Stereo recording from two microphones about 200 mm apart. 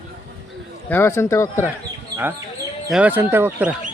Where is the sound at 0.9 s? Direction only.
15° left (ahead or behind).